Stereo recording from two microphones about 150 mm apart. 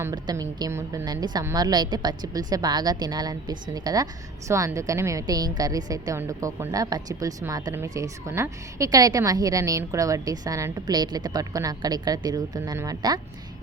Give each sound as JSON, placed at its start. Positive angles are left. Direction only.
{"t": 0.0, "sound": "a woman's voice", "side_deg": -25}